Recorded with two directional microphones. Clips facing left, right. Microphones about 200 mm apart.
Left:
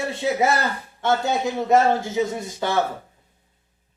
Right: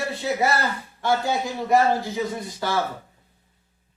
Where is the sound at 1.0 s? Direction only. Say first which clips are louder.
Left 2 dB; 20° left (ahead or behind).